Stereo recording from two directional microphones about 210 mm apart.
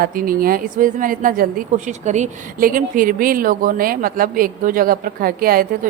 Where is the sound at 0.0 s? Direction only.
45° right (ahead or behind).